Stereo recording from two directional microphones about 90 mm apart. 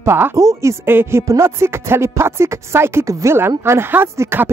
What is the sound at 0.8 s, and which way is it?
Speech, 25° right (ahead or behind).